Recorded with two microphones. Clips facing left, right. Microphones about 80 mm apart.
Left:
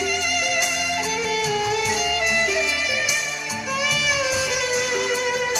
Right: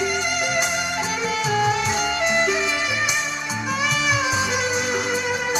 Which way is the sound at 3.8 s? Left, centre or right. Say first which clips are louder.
Right 2 dB; right.